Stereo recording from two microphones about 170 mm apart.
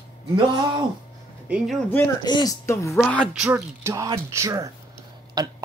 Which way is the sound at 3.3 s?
10° right (ahead or behind).